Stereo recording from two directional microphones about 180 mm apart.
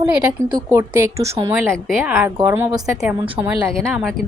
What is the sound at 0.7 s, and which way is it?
A woman's voice, 15° right (ahead or behind).